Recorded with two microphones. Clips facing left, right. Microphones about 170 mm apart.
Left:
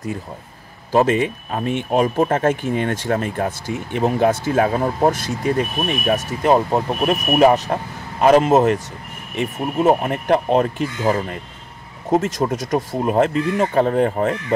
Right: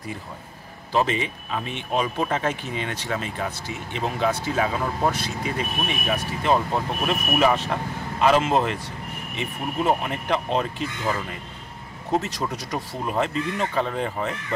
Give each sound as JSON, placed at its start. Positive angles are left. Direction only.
{"t": 0.9, "sound": "speech", "side_deg": 50}